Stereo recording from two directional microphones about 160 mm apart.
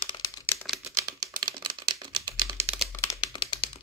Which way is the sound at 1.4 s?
30° right (ahead or behind).